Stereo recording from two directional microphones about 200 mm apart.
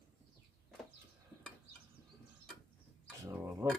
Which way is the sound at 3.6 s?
15° right (ahead or behind).